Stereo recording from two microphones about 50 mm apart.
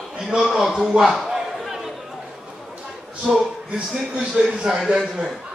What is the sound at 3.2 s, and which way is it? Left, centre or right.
A man's voice, centre.